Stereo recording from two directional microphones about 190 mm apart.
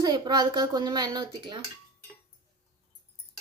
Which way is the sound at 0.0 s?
20° right (ahead or behind).